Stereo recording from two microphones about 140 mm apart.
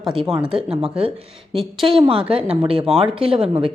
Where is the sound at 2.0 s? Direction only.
40° right (ahead or behind).